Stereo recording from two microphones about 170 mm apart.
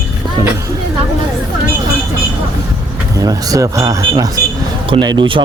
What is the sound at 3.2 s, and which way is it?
Speech, 20° right (ahead or behind).